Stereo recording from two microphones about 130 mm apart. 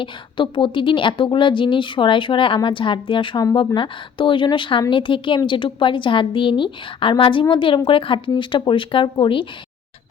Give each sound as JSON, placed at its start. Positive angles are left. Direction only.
{"t": 0.0, "sound": "a woman's voice", "side_deg": 40}